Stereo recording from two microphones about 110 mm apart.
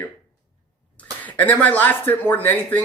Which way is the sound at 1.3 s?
15° left (ahead or behind).